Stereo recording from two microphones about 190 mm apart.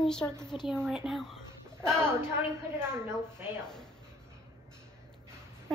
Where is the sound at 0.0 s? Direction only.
5° left (ahead or behind).